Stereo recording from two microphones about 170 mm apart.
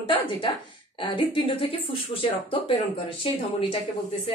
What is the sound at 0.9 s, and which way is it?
Speech, 30° left (ahead or behind).